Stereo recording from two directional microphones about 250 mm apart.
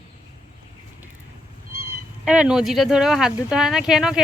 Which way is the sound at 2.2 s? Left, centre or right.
Centre.